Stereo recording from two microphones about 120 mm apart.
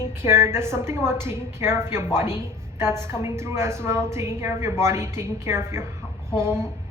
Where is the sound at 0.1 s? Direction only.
20° right (ahead or behind).